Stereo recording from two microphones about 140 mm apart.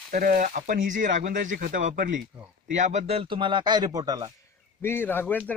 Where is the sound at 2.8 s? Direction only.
55° right (ahead or behind); by 4.3 s 30° right (ahead or behind).